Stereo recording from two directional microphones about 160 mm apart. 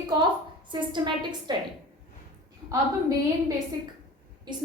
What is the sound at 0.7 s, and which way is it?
Speech, 30° right (ahead or behind).